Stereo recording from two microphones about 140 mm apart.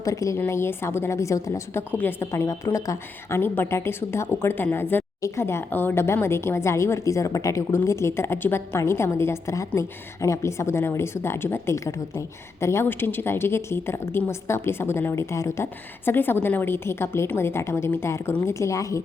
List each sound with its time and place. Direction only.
0.0 s a woman's voice: 25° left (ahead or behind)